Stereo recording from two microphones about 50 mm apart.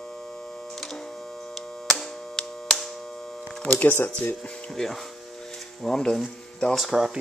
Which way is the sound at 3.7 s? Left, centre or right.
Left.